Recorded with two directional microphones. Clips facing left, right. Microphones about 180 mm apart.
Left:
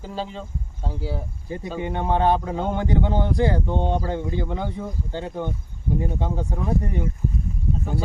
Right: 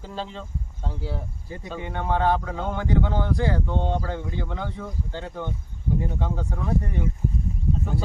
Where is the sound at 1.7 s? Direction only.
20° left (ahead or behind).